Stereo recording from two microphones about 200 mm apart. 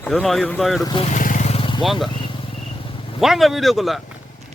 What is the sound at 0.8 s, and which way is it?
Speech, 25° left (ahead or behind).